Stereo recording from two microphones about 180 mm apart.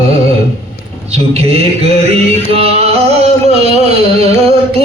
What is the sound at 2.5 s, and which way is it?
Music, 35° right (ahead or behind).